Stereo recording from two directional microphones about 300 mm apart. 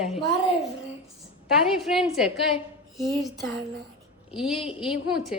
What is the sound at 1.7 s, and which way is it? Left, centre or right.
A woman's voice, centre.